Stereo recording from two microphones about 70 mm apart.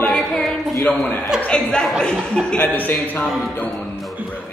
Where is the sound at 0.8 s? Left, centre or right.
Centre.